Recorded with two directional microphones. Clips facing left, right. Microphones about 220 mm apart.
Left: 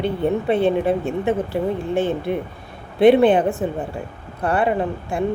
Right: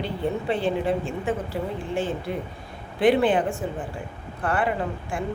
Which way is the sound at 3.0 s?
25° left (ahead or behind).